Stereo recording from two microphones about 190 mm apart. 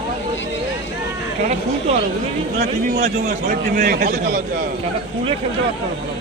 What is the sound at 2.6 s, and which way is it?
A man's voice, 40° right (ahead or behind).